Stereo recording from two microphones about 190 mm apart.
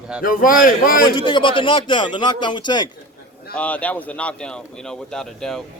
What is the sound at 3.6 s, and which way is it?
Speech, 5° left (ahead or behind).